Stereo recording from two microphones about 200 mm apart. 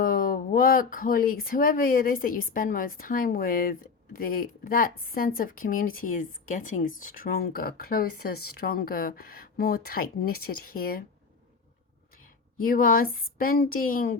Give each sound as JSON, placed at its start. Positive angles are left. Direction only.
{"t": 0.0, "sound": "speech", "side_deg": 45}
{"t": 12.6, "sound": "speech", "side_deg": 45}